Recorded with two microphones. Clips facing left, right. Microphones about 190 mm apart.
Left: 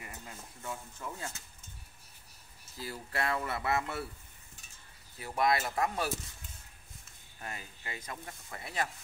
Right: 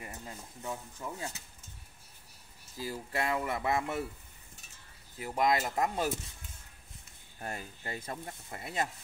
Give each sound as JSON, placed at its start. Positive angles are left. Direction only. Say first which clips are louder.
{"t": 0.0, "sound": "speech", "louder": "right 3 dB", "side_deg": -25}
{"t": 2.8, "sound": "speech", "louder": "right 2 dB", "side_deg": -15}
{"t": 5.2, "sound": "speech", "louder": "right 1 dB", "side_deg": -20}
{"t": 7.3, "sound": "speech", "louder": "right 4 dB", "side_deg": -40}